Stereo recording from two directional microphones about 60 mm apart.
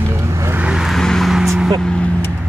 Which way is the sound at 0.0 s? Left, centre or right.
Right.